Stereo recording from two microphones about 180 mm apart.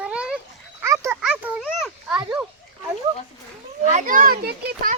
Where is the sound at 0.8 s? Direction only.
15° right (ahead or behind).